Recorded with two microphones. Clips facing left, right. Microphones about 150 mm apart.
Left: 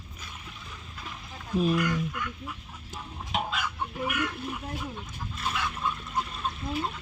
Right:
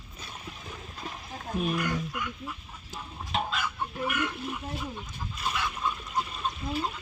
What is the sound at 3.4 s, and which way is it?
Chicken, 5° left (ahead or behind).